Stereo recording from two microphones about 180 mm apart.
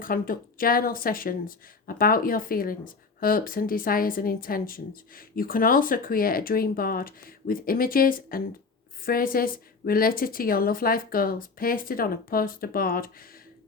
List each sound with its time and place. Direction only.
0.0 s speech: 50° left (ahead or behind)